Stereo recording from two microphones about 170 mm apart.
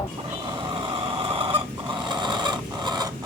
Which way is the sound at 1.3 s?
30° right (ahead or behind).